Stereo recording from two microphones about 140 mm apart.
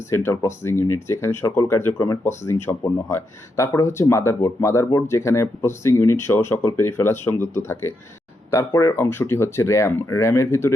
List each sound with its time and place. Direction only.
0.1 s speech: 20° left (ahead or behind)